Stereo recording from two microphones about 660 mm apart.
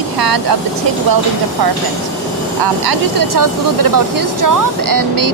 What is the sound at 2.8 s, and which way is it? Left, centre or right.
Speech, right.